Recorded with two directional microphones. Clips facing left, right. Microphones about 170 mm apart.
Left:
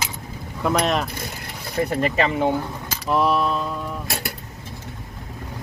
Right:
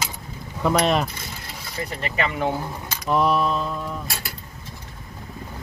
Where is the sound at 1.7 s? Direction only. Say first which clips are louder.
Left 9 dB; 50° left (ahead or behind).